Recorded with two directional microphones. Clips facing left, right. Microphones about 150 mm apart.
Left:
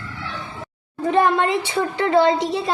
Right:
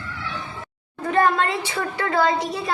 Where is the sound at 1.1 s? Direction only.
20° left (ahead or behind).